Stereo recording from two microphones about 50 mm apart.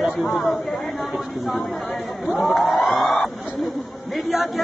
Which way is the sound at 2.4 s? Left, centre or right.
Centre.